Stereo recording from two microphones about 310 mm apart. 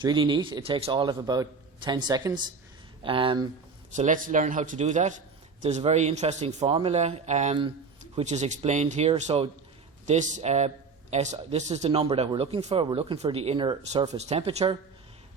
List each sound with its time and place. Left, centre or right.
0.0 s a man's voice: centre